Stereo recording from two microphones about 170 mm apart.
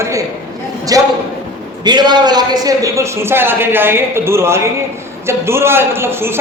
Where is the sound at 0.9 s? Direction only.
20° right (ahead or behind).